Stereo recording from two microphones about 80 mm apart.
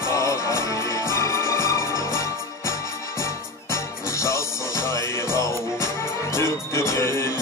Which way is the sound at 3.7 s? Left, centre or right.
Left.